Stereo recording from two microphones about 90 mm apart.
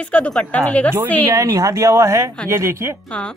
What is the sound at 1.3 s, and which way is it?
Speech, 40° right (ahead or behind).